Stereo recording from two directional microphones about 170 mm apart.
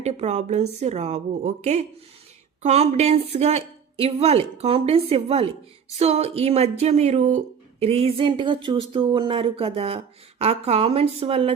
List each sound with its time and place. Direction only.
0.0 s speech: 40° right (ahead or behind)